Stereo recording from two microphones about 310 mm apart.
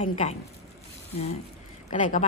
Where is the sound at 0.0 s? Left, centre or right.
Centre.